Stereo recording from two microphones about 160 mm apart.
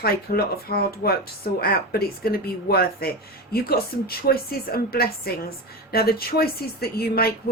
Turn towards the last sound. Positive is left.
turn(degrees=75)  # may be behind; listen again after turning